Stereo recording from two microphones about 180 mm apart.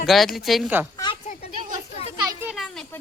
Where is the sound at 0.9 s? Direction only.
25° left (ahead or behind).